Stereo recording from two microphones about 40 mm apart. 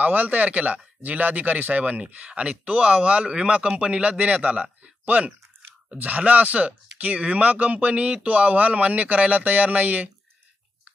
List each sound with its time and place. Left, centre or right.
0.0 s speech: right
2.3 s speech: right